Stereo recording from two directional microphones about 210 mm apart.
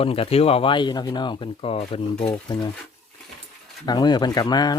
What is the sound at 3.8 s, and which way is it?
Speech, 20° left (ahead or behind).